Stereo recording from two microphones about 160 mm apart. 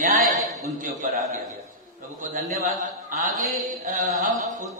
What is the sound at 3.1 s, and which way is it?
Mantra, 55° right (ahead or behind).